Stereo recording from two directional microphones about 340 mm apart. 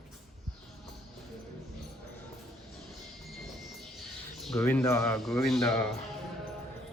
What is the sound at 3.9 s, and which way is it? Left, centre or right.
A man's voice, centre.